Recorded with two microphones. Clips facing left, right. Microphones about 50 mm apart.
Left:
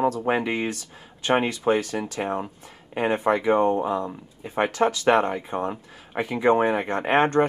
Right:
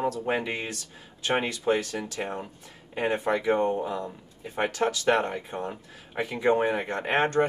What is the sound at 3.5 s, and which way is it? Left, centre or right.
Speech, left.